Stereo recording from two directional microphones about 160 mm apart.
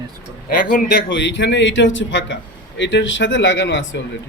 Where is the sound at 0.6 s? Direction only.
60° left (ahead or behind).